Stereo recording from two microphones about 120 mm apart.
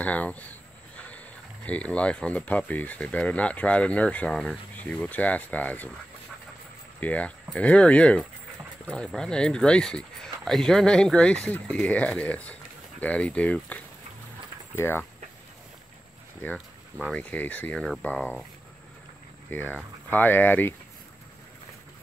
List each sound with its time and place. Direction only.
0.0 s speech: 10° left (ahead or behind)
7.0 s speech: 10° left (ahead or behind)
16.4 s speech: 5° left (ahead or behind)
19.5 s speech: 15° left (ahead or behind)